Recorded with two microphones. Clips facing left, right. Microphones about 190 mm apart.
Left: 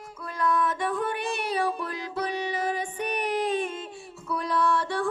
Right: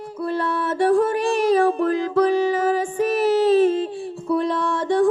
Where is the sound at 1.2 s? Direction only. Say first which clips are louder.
Right 11 dB; 90° right.